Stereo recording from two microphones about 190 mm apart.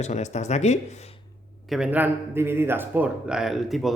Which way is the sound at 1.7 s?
5° right (ahead or behind).